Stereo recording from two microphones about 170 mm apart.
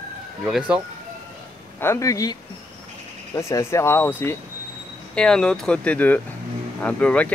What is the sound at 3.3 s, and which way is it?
Speech, 15° left (ahead or behind).